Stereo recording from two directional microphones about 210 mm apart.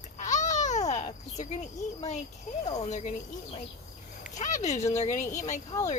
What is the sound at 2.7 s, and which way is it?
Speech, 35° left (ahead or behind).